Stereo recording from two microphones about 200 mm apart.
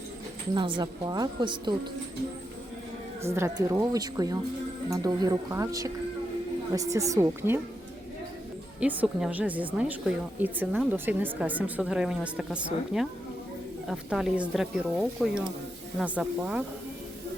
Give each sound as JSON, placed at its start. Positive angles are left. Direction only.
{"t": 0.5, "sound": "a woman's voice", "side_deg": -20}
{"t": 3.2, "sound": "a woman's voice", "side_deg": -15}
{"t": 8.8, "sound": "a woman's voice", "side_deg": -5}